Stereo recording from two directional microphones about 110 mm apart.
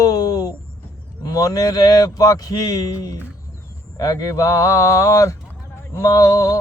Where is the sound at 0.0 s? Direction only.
35° left (ahead or behind).